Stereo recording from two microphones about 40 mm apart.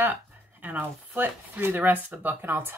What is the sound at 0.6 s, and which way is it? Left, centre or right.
Speech, right.